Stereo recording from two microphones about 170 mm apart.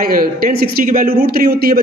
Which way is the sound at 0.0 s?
60° right (ahead or behind).